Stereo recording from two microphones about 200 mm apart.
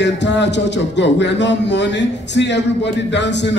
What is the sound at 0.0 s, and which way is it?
A man's voice, 60° left (ahead or behind).